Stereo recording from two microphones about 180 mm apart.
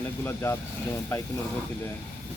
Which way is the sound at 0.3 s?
15° left (ahead or behind).